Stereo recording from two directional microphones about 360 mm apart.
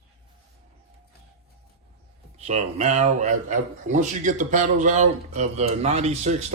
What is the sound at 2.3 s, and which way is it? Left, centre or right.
A man's voice, centre.